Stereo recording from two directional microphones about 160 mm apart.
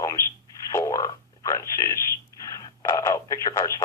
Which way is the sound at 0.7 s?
20° left (ahead or behind).